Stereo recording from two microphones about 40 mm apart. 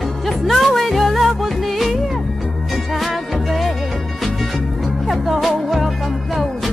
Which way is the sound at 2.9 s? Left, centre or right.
Centre.